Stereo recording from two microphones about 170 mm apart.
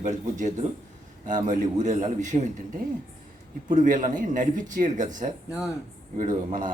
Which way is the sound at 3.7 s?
50° right (ahead or behind).